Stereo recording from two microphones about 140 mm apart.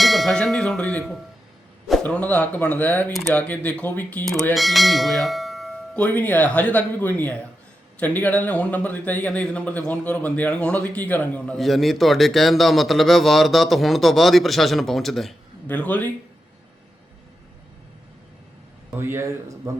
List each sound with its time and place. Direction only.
0.0 s tubular bells: centre (ahead or behind)
2.0 s speech: 10° left (ahead or behind)
18.9 s a man's voice: 15° right (ahead or behind)